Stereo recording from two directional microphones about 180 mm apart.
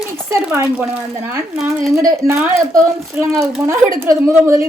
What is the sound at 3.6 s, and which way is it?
Speech, 15° right (ahead or behind).